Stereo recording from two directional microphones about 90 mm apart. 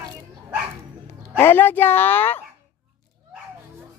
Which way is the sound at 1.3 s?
25° left (ahead or behind).